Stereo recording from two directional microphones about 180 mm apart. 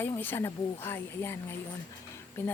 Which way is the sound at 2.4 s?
10° left (ahead or behind).